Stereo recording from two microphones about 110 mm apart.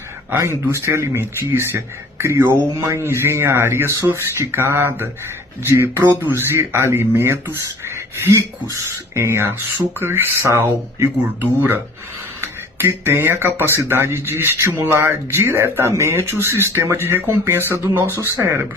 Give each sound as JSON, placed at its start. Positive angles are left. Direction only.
{"t": 0.3, "sound": "speech", "side_deg": -25}